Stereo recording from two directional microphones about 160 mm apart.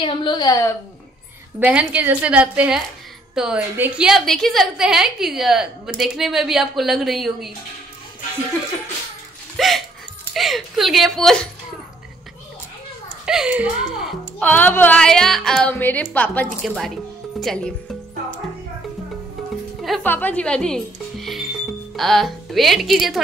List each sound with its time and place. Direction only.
0.0 s a woman's voice: 30° left (ahead or behind)
1.6 s a woman's voice: 10° right (ahead or behind)
9.6 s a woman's voice: centre (ahead or behind)
13.2 s a woman's voice: 5° right (ahead or behind)
14.4 s speech: 10° left (ahead or behind)
20.0 s speech: 10° left (ahead or behind)